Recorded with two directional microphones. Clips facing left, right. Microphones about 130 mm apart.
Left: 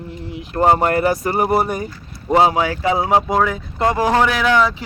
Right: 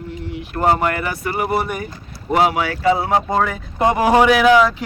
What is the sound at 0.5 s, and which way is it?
Speech, 35° left (ahead or behind).